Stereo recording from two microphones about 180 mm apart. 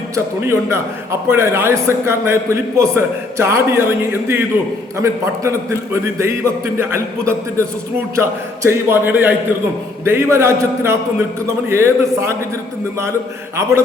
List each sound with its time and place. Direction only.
0.4 s a man's voice: 15° right (ahead or behind)